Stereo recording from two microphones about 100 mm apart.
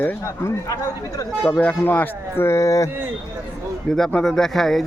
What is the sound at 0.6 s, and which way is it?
Speech, 35° left (ahead or behind).